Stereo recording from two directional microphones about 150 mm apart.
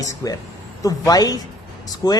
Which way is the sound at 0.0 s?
25° left (ahead or behind).